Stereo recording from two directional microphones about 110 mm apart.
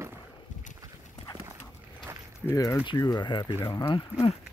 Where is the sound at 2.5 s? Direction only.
25° left (ahead or behind).